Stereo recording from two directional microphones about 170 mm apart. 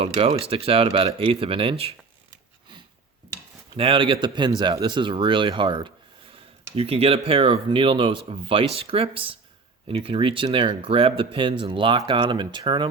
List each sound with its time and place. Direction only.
0.0 s speech: 35° right (ahead or behind)
3.8 s speech: 30° right (ahead or behind)